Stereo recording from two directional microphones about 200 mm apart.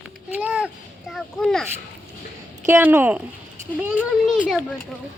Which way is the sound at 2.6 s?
10° right (ahead or behind).